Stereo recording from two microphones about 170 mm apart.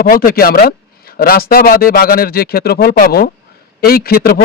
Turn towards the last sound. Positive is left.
turn(degrees=60)  # may be behind; listen again after turning